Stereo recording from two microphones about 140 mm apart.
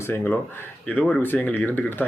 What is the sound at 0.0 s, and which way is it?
Speech, 15° left (ahead or behind).